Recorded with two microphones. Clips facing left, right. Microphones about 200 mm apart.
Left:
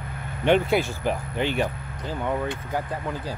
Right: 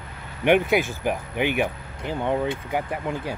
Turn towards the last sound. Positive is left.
turn(degrees=-20)  # may be behind; listen again after turning